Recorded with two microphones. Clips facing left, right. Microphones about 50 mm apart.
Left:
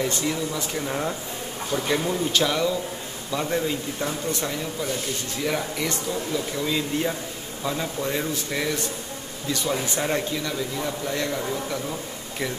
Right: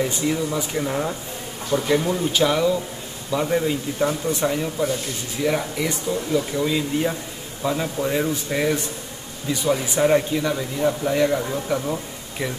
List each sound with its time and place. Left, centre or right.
0.0 s a man's voice: centre